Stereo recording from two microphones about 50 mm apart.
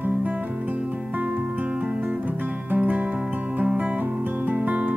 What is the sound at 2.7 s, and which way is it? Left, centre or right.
Music, right.